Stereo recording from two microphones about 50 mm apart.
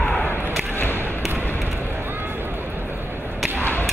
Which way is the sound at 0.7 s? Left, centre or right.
Left.